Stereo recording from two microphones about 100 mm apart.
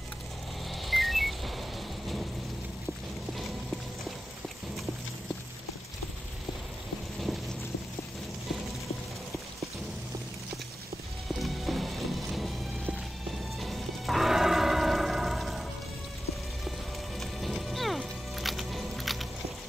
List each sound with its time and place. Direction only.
0.8 s a sound: centre (ahead or behind)
11.2 s music: centre (ahead or behind)
17.2 s music: centre (ahead or behind)